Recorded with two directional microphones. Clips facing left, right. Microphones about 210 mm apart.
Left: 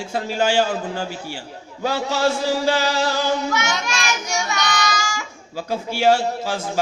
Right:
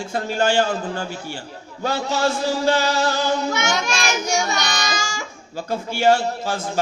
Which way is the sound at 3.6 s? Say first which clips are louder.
Right 2 dB; 30° right (ahead or behind).